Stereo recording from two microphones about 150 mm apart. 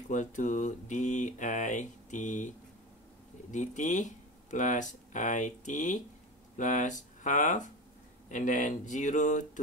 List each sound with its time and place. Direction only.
0.1 s speech: 55° left (ahead or behind)
3.5 s speech: 55° left (ahead or behind)